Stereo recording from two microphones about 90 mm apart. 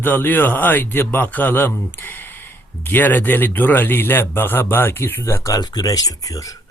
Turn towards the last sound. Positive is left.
turn(degrees=40)  # may be behind; listen again after turning